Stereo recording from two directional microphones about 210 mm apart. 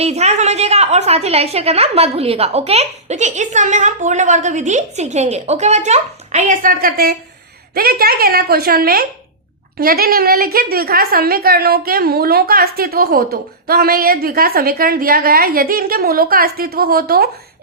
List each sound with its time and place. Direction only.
0.0 s a woman's voice: 30° right (ahead or behind)